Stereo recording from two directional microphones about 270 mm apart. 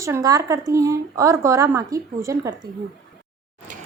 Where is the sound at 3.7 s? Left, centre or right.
Right.